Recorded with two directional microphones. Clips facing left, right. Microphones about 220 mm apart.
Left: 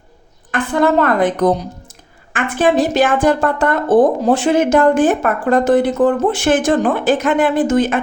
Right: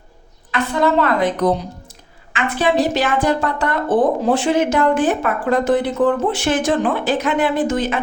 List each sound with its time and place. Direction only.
0.5 s a woman's voice: 50° left (ahead or behind)